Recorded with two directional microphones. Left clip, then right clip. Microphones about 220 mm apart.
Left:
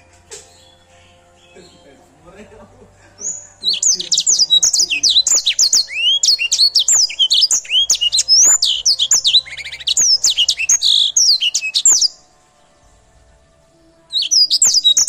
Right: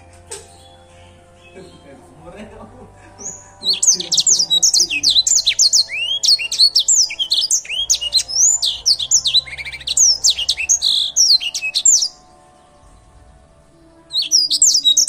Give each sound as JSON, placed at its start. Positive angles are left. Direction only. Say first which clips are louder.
{"t": 3.6, "sound": "bird", "louder": "even", "side_deg": 10}
{"t": 7.6, "sound": "chirp", "louder": "left 5 dB", "side_deg": 15}
{"t": 14.2, "sound": "bird", "louder": "left 2 dB", "side_deg": 10}